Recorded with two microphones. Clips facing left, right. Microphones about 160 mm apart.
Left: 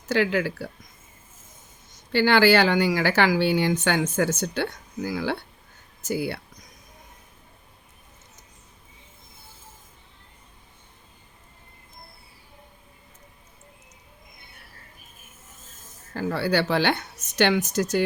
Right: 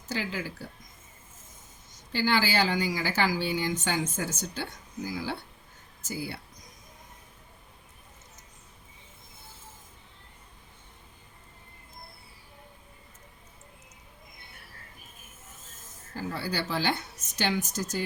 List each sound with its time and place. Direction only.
0.1 s speech: 70° left (ahead or behind)
2.1 s speech: 70° left (ahead or behind)
16.1 s speech: 70° left (ahead or behind)